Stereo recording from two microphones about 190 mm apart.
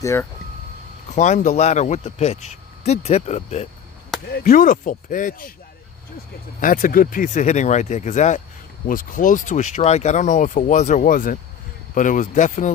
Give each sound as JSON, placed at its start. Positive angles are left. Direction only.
{"t": 0.0, "sound": "speech", "side_deg": 15}
{"t": 1.1, "sound": "speech", "side_deg": 40}
{"t": 4.3, "sound": "speech", "side_deg": 55}
{"t": 6.6, "sound": "speech", "side_deg": 45}